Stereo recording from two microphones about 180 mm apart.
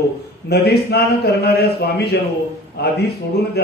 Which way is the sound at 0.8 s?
60° left (ahead or behind).